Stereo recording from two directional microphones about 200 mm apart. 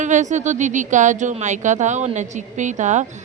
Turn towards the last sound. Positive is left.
turn(degrees=-35)  # may be behind; listen again after turning